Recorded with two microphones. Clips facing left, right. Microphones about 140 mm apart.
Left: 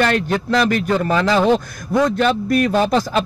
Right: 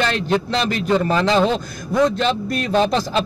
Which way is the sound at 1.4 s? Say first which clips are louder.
Left 3 dB; 10° left (ahead or behind).